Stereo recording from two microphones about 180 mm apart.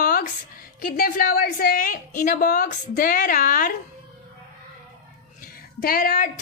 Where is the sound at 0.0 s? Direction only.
55° left (ahead or behind).